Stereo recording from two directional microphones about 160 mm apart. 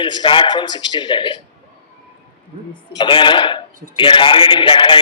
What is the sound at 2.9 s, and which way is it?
A man's voice, 30° left (ahead or behind).